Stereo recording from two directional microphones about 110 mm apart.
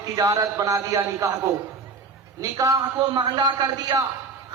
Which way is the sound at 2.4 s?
35° right (ahead or behind).